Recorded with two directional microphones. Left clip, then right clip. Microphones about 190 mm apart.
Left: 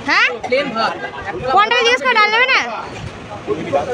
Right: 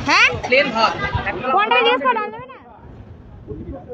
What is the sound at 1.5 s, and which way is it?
Speech, 15° left (ahead or behind).